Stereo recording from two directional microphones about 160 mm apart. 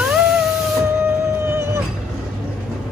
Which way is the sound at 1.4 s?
15° right (ahead or behind).